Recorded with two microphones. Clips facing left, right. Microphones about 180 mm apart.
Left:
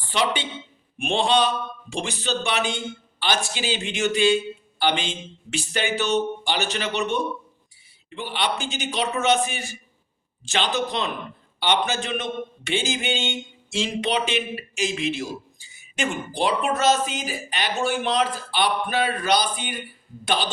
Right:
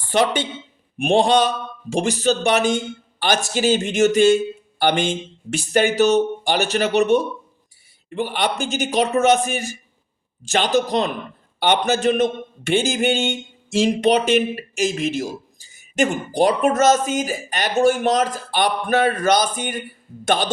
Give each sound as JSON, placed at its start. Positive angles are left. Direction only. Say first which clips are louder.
{"t": 0.0, "sound": "a woman's voice", "louder": "right 6 dB", "side_deg": -50}